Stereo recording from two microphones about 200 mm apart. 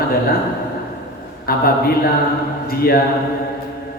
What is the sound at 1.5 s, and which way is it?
A man's voice, 50° left (ahead or behind).